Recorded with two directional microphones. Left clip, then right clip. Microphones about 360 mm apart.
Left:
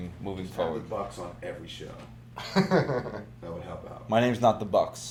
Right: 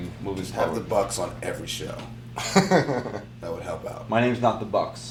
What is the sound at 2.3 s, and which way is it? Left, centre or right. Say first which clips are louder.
Speech: right 5 dB; right.